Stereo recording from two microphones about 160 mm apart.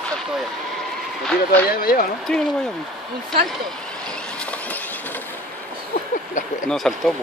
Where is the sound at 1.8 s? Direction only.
60° left (ahead or behind).